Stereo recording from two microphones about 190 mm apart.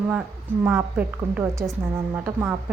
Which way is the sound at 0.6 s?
10° right (ahead or behind).